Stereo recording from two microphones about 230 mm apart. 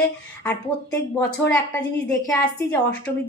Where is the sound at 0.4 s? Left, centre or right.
Centre.